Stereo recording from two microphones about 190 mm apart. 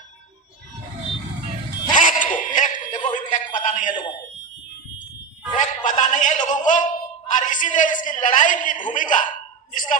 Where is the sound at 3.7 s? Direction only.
40° left (ahead or behind).